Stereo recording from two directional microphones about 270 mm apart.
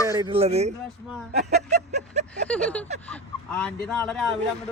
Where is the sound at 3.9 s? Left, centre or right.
Centre.